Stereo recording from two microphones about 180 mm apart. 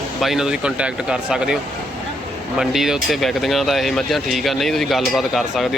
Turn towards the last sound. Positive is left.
turn(degrees=0)  # may be behind; listen again after turning